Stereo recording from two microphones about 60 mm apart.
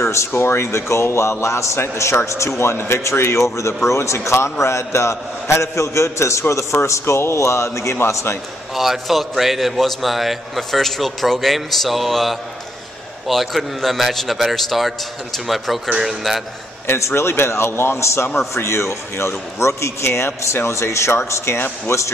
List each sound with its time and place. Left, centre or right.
0.0 s a man's voice: left
8.7 s a man's voice: centre
16.8 s a man's voice: left